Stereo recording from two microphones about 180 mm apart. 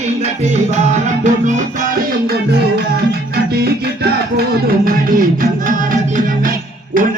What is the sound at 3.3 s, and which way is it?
Music, 60° right (ahead or behind).